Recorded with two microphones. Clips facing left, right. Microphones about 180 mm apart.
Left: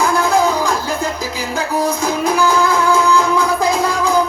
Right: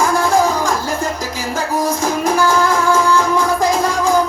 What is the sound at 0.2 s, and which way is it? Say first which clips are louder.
Music: even; 45° right (ahead or behind).